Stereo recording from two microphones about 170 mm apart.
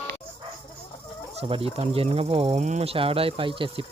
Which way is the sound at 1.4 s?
35° right (ahead or behind).